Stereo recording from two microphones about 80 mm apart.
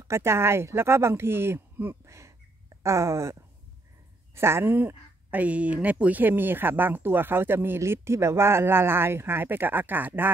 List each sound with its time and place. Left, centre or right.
0.1 s speech: right
4.4 s speech: right